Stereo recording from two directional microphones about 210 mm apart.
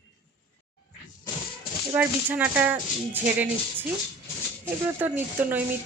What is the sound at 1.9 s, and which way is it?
Speech, 10° right (ahead or behind).